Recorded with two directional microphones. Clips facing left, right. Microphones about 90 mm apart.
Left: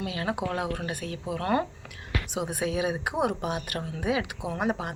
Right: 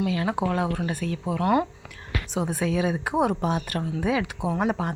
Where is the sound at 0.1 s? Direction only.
30° right (ahead or behind).